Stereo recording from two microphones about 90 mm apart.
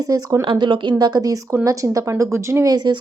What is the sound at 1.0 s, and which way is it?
Speech, 45° right (ahead or behind).